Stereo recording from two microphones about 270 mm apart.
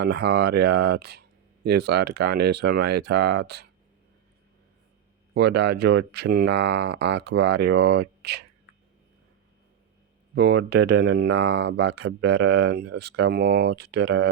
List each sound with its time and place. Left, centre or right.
0.0 s speech: right
5.3 s speech: right
10.3 s speech: right